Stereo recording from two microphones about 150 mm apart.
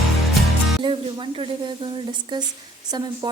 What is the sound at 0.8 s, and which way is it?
A woman's voice, 35° right (ahead or behind).